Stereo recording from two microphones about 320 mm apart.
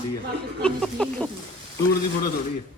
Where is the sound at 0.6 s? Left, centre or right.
Centre.